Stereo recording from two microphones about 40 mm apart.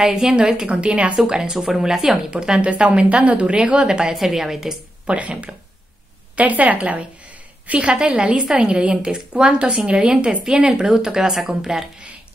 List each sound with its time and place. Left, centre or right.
0.0 s a woman's voice: centre
0.7 s a woman's voice: right
1.1 s speech: centre
2.6 s a woman's voice: right
3.7 s a woman's voice: centre
4.1 s speech: centre
5.0 s a woman's voice: right; by 11.8 s centre